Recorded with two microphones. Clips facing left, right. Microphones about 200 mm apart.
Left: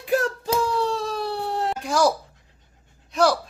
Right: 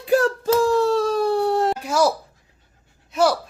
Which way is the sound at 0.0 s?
35° right (ahead or behind).